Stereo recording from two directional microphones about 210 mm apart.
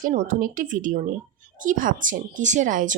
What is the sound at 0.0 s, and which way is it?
Speech, 40° right (ahead or behind).